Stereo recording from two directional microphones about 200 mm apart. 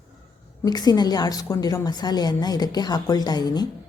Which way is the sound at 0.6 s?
20° left (ahead or behind).